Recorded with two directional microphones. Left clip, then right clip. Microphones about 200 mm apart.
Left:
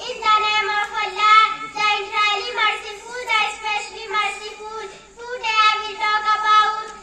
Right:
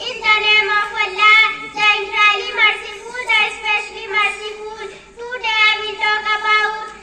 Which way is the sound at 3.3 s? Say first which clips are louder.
Right 5 dB; 35° left (ahead or behind).